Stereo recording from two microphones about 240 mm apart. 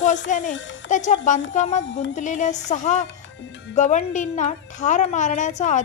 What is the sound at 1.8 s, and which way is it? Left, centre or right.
Speech, left.